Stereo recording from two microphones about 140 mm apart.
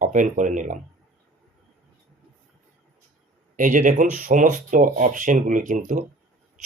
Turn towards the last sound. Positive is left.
turn(degrees=-65)  # may be behind; listen again after turning